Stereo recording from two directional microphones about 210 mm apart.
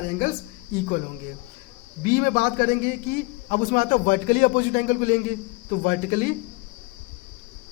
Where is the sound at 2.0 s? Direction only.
40° left (ahead or behind).